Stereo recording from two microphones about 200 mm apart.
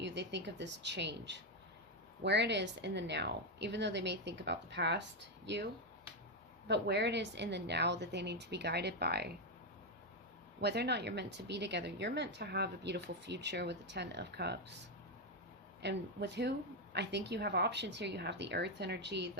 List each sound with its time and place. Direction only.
0.0 s speech: 60° right (ahead or behind)
6.7 s speech: 60° right (ahead or behind)
10.6 s speech: 55° right (ahead or behind)
15.8 s speech: 60° right (ahead or behind)